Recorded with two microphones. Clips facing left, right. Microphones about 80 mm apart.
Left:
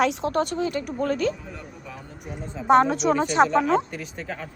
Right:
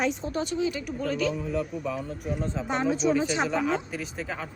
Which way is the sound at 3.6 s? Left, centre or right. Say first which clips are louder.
Left 6 dB; centre.